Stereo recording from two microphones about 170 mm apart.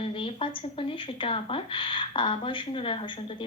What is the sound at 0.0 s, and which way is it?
Speech, 30° left (ahead or behind).